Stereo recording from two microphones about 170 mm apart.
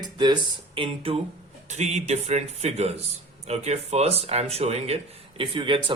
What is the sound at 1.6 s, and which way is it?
A man's voice, 45° right (ahead or behind).